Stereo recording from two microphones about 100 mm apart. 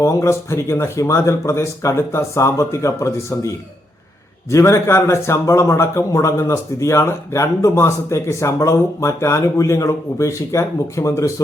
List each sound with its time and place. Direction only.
0.0 s a man's voice: 30° left (ahead or behind)
4.5 s a man's voice: 30° left (ahead or behind)